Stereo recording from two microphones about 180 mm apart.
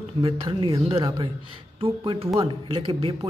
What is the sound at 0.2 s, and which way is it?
Speech, 30° right (ahead or behind).